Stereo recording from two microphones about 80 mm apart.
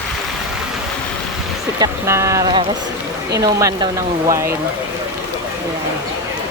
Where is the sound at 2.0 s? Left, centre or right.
Right.